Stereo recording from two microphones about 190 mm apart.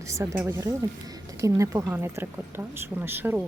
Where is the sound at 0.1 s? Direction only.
15° right (ahead or behind).